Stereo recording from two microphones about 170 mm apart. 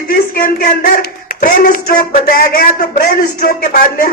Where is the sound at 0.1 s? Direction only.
55° left (ahead or behind).